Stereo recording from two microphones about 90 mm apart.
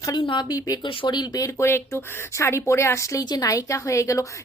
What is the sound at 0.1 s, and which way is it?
Speech, 60° left (ahead or behind).